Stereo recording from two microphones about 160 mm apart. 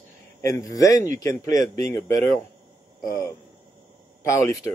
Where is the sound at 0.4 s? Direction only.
20° left (ahead or behind).